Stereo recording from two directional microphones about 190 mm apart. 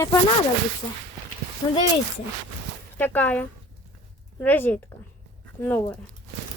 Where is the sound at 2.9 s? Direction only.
10° left (ahead or behind).